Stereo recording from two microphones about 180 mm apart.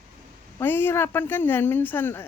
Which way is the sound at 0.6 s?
10° left (ahead or behind).